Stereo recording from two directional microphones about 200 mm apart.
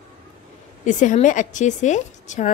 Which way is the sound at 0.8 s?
40° left (ahead or behind).